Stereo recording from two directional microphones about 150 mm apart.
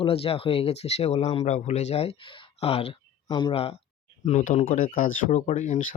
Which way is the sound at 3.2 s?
30° left (ahead or behind).